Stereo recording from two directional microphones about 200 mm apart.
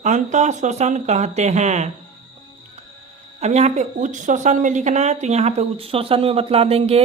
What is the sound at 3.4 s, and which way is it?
Speech, 35° right (ahead or behind).